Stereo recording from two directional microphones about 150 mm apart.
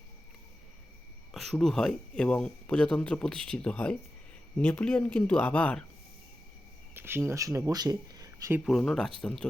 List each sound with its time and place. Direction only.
1.3 s speech: centre (ahead or behind)
6.9 s speech: 15° right (ahead or behind)
8.6 s speech: centre (ahead or behind)